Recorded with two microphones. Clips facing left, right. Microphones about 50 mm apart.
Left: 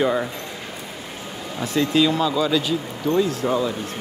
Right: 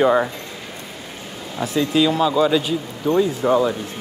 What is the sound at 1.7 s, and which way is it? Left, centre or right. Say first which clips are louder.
Speech: right 1 dB; centre.